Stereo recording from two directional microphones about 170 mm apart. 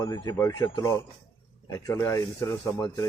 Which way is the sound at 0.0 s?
20° left (ahead or behind).